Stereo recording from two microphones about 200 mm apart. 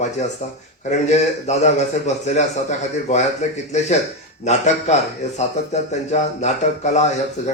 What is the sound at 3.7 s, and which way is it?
Speech, 35° left (ahead or behind).